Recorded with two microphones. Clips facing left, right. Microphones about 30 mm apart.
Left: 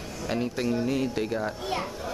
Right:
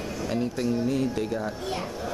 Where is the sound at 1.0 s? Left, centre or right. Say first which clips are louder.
Right 1 dB; left.